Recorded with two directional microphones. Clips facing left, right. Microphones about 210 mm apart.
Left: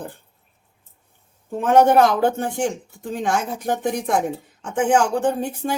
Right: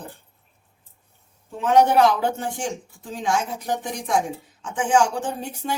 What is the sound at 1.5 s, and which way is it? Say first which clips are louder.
Speech: left 3 dB; 50° left (ahead or behind).